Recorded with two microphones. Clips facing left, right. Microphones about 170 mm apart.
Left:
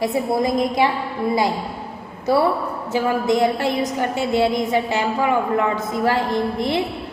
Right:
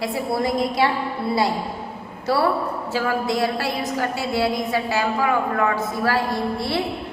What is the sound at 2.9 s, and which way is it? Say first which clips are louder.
A woman's voice: left 5 dB; 20° left (ahead or behind).